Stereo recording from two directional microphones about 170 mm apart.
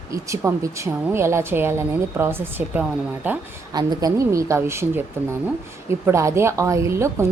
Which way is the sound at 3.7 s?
25° right (ahead or behind).